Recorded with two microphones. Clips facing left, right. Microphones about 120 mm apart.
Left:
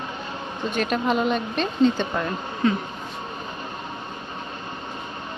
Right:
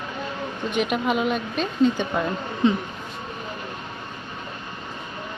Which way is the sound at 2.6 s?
20° right (ahead or behind).